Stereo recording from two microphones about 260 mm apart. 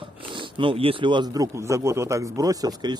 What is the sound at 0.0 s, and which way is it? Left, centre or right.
A man's voice, centre.